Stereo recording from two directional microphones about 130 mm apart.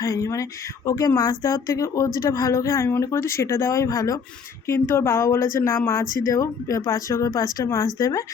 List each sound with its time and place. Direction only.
0.0 s speech: 25° left (ahead or behind)